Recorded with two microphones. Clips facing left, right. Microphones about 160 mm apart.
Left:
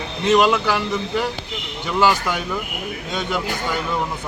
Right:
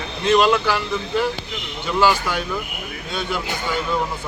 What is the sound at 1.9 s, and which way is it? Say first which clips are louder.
Speech: even; 15° left (ahead or behind).